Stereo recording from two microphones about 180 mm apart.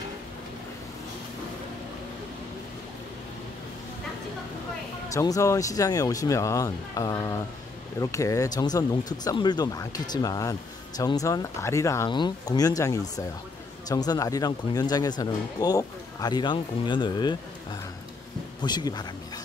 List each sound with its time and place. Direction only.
5.1 s speech: 20° left (ahead or behind)